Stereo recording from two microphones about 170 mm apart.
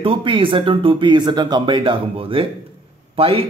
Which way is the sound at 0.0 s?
30° right (ahead or behind).